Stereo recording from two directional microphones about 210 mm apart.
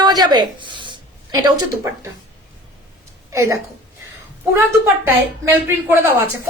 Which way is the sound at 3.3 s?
15° right (ahead or behind).